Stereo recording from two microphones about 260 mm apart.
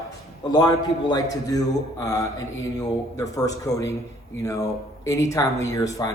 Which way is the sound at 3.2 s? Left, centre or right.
Centre.